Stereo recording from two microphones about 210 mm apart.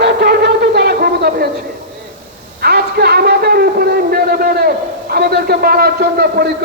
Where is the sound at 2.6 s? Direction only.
50° right (ahead or behind).